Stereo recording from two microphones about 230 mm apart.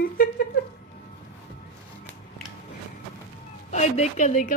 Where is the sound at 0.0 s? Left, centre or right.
Left.